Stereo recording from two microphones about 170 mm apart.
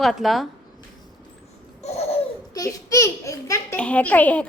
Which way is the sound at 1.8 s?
40° left (ahead or behind).